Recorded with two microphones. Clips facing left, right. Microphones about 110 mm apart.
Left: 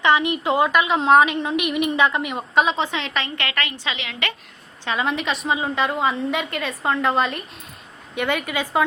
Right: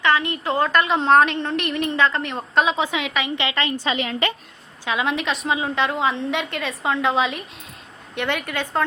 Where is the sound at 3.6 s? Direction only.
40° right (ahead or behind).